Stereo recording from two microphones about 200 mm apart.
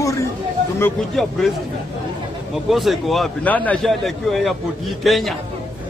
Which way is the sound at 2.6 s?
Centre (ahead or behind).